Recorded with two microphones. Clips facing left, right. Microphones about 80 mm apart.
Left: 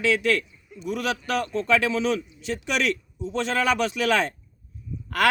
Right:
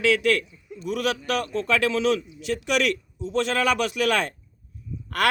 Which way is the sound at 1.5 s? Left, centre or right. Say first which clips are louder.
Left 1 dB; right.